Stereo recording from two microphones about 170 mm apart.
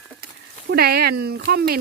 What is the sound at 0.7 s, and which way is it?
Speech, 70° right (ahead or behind).